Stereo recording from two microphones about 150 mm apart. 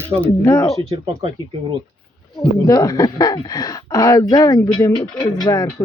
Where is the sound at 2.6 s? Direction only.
25° left (ahead or behind).